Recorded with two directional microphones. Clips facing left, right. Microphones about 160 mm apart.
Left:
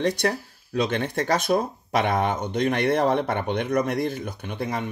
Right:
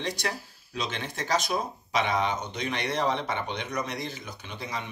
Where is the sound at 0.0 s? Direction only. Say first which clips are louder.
Left 9 dB; 55° left (ahead or behind).